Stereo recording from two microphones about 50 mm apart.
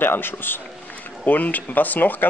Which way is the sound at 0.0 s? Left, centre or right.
Left.